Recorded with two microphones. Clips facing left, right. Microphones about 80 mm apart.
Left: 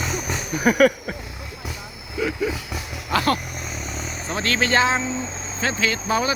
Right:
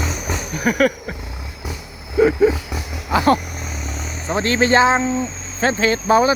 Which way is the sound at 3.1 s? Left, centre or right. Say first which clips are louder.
Right 5 dB; right.